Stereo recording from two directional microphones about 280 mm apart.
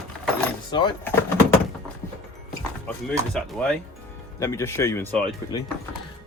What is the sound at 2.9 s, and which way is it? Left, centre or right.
Speech, centre.